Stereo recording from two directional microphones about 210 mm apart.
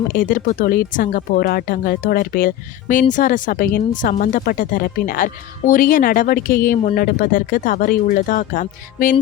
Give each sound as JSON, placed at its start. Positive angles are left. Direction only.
{"t": 0.1, "sound": "speech", "side_deg": 40}